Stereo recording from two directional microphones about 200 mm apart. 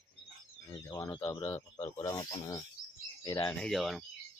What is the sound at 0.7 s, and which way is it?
Speech, 20° left (ahead or behind).